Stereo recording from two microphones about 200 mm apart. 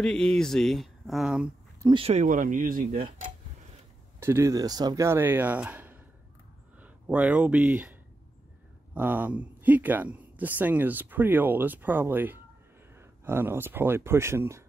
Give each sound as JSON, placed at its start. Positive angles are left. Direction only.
{"t": 0.0, "sound": "speech", "side_deg": 5}
{"t": 1.8, "sound": "speech", "side_deg": -25}
{"t": 2.2, "sound": "speech", "side_deg": -40}
{"t": 4.2, "sound": "speech", "side_deg": -10}